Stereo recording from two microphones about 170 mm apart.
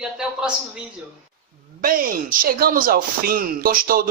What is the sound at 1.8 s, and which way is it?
Speech, 55° right (ahead or behind).